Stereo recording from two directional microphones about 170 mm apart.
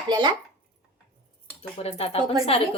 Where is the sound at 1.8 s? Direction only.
35° left (ahead or behind).